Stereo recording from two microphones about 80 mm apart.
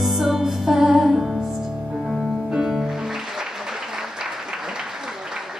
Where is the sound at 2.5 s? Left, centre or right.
Centre.